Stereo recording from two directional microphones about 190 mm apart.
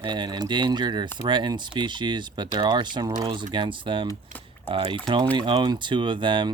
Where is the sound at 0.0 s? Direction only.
25° right (ahead or behind).